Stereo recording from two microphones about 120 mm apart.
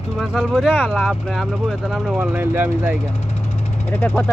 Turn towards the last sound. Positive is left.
turn(degrees=20)  # may be behind; listen again after turning